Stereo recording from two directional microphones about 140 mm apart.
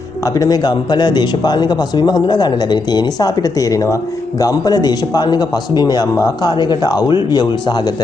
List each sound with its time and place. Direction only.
0.2 s speech: 25° left (ahead or behind)